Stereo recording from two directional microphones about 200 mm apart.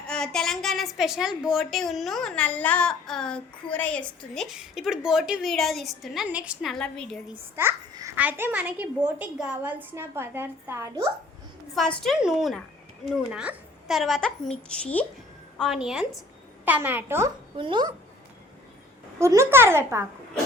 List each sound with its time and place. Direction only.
0.1 s a woman's voice: 5° left (ahead or behind)
7.5 s a child's voice: 10° right (ahead or behind)
11.7 s a woman's voice: centre (ahead or behind)
17.6 s speech: 20° right (ahead or behind)
19.2 s a child's voice: 15° right (ahead or behind)